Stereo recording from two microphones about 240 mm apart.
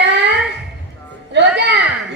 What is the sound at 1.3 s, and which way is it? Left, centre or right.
Speech, right.